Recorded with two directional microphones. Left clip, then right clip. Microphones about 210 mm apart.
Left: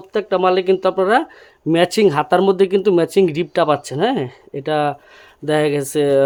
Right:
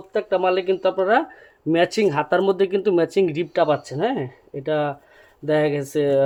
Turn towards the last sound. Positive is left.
turn(degrees=35)  # may be behind; listen again after turning